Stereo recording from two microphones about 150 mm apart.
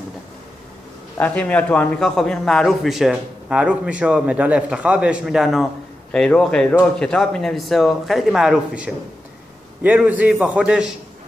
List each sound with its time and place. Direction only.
1.1 s a man's voice: 10° left (ahead or behind)